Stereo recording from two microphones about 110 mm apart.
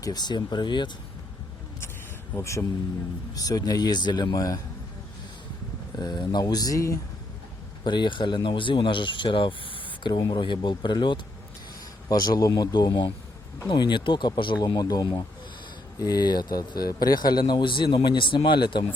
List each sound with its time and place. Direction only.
0.0 s speech: 40° left (ahead or behind)
2.3 s speech: 25° left (ahead or behind)
6.0 s speech: 40° left (ahead or behind)
7.9 s speech: 45° left (ahead or behind)